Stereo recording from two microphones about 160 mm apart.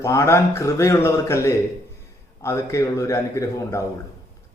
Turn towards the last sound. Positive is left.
turn(degrees=20)  # may be behind; listen again after turning